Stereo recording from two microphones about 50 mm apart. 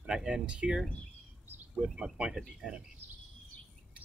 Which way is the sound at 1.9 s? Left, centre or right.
Centre.